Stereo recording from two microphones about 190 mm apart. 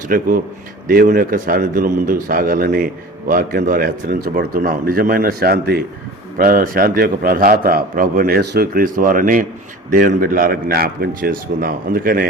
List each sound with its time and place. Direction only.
0.1 s a man's voice: 50° right (ahead or behind)